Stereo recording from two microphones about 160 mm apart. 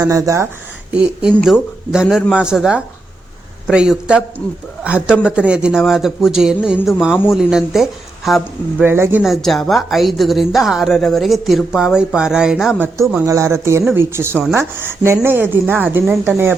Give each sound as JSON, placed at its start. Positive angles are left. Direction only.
{"t": 0.0, "sound": "speech", "side_deg": -20}
{"t": 1.4, "sound": "a woman's voice", "side_deg": -5}
{"t": 8.8, "sound": "speech", "side_deg": -15}
{"t": 9.2, "sound": "a woman's voice", "side_deg": 0}
{"t": 13.2, "sound": "speech", "side_deg": -20}